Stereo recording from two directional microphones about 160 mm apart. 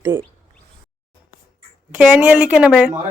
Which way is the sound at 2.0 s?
10° right (ahead or behind).